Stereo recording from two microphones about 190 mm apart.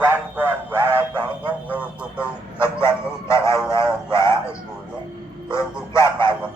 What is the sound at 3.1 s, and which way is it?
Speech, 15° left (ahead or behind).